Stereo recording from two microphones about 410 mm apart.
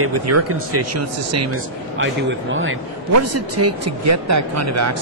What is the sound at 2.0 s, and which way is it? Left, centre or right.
A man's voice, right.